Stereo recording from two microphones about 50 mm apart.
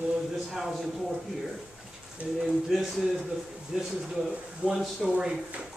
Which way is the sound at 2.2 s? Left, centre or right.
Right.